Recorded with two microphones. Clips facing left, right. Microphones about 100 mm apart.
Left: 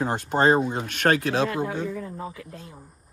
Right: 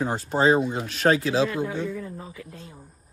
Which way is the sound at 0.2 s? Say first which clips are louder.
Even; 70° left (ahead or behind).